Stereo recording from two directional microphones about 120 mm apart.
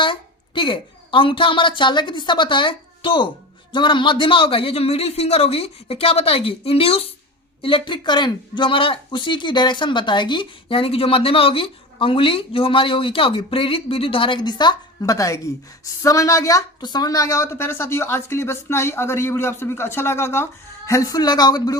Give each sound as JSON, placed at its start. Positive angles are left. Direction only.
{"t": 0.0, "sound": "a woman's voice", "side_deg": 45}
{"t": 7.6, "sound": "a woman's voice", "side_deg": 45}